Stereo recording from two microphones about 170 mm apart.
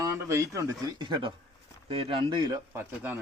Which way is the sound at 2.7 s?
10° right (ahead or behind).